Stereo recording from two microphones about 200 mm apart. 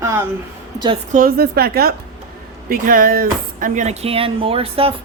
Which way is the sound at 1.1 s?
45° right (ahead or behind).